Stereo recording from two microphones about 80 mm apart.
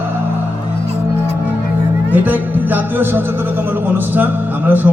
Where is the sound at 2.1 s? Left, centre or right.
Right.